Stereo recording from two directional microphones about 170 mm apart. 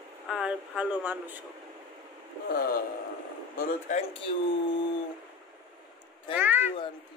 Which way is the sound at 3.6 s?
50° left (ahead or behind).